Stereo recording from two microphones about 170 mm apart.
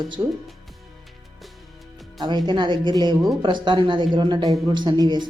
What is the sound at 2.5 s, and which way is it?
Speech, 25° right (ahead or behind).